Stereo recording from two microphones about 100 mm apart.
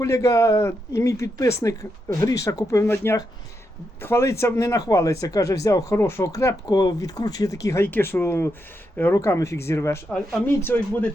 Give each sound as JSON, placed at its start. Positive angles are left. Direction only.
{"t": 0.0, "sound": "speech", "side_deg": 30}
{"t": 6.7, "sound": "speech", "side_deg": 45}
{"t": 7.9, "sound": "speech", "side_deg": 20}